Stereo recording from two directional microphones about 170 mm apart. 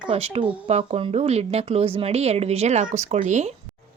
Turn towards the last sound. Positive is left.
turn(degrees=-45)  # may be behind; listen again after turning